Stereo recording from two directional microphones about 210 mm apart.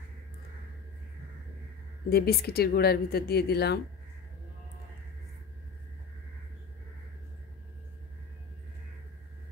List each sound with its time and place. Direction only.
2.0 s a woman's voice: 50° left (ahead or behind)